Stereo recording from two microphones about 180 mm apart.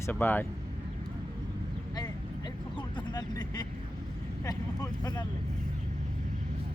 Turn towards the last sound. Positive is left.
turn(degrees=20)  # may be behind; listen again after turning